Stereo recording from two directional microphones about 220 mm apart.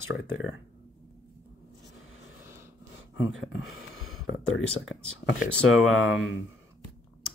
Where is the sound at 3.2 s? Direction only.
65° left (ahead or behind).